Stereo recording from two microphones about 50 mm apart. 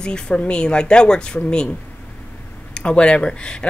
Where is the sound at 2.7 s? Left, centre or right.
Left.